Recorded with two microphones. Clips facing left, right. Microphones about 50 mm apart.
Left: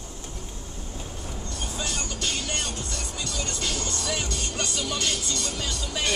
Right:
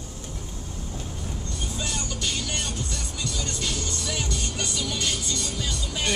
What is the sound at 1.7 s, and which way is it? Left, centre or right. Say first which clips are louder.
Music: even; left.